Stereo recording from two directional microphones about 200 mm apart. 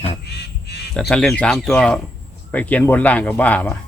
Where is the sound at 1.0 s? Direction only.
5° left (ahead or behind).